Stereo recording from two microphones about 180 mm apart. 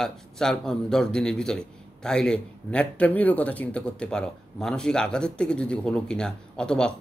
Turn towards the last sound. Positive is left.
turn(degrees=5)  # may be behind; listen again after turning